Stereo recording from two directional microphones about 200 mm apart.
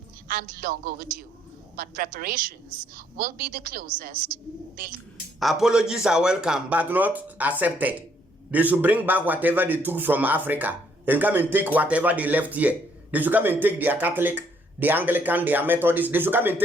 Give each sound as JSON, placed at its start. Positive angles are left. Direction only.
{"t": 0.3, "sound": "a woman's voice", "side_deg": -45}
{"t": 5.4, "sound": "a man's voice", "side_deg": 0}